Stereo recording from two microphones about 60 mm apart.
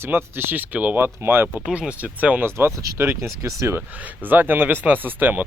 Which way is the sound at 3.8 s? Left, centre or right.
Right.